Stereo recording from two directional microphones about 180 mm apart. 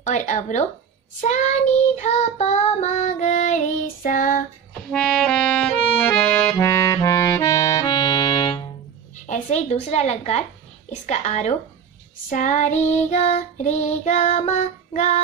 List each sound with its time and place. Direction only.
0.0 s speech: 45° left (ahead or behind)
1.2 s child singing: 40° left (ahead or behind)
4.9 s accordion: 5° left (ahead or behind); by 8.6 s 25° left (ahead or behind)
9.1 s a woman's voice: 45° left (ahead or behind)
10.9 s child singing: 40° left (ahead or behind)